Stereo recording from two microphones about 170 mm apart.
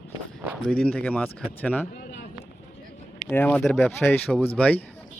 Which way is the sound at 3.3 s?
10° left (ahead or behind).